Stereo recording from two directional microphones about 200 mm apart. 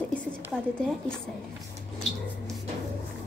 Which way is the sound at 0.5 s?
Centre (ahead or behind).